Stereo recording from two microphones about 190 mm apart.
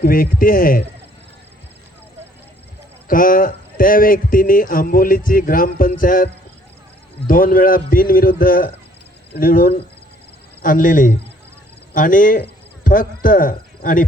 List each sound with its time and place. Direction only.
0.0 s speech: 50° left (ahead or behind)
3.1 s speech: 45° left (ahead or behind)
7.3 s speech: 50° left (ahead or behind)